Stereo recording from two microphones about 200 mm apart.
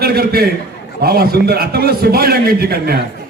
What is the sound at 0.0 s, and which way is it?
A man's voice, 50° right (ahead or behind).